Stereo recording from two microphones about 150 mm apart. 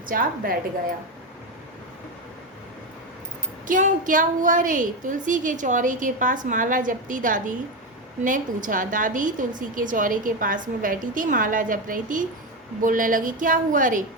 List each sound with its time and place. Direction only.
0.1 s a woman's voice: 70° right (ahead or behind)
3.7 s a woman's voice: 60° right (ahead or behind)